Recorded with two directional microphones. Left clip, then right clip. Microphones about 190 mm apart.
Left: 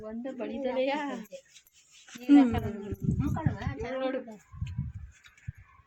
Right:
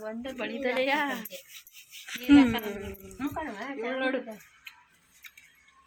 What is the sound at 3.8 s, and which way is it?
Speech, 30° right (ahead or behind).